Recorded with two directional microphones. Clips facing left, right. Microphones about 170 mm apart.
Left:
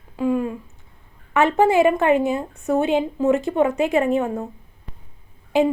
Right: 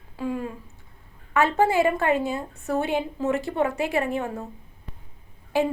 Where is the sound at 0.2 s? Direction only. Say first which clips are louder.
Left 8 dB; 20° left (ahead or behind).